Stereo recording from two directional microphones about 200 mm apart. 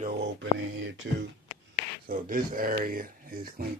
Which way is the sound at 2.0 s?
45° right (ahead or behind).